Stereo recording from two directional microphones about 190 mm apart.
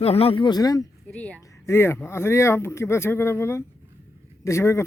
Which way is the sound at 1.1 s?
5° left (ahead or behind).